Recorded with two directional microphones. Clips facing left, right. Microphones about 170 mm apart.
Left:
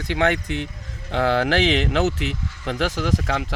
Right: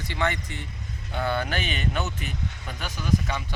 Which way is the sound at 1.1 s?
90° left.